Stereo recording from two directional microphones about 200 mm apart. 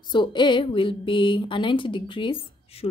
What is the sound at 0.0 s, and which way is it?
A woman's voice, 20° left (ahead or behind).